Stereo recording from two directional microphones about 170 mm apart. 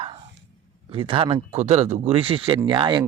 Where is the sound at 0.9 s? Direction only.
30° right (ahead or behind).